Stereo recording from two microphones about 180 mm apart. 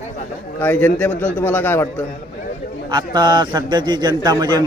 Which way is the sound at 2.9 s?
25° right (ahead or behind).